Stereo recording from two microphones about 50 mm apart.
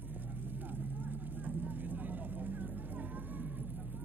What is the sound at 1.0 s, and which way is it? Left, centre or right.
Vehicle, right.